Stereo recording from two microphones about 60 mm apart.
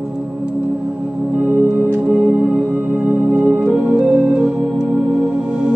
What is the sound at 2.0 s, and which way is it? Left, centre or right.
Music, centre.